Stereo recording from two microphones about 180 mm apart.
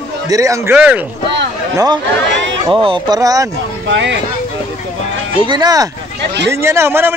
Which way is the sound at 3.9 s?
90° right.